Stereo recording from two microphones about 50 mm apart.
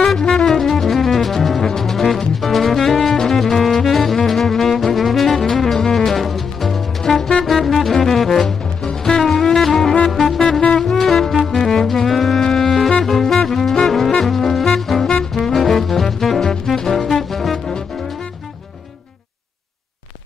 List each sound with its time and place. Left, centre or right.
0.3 s music: centre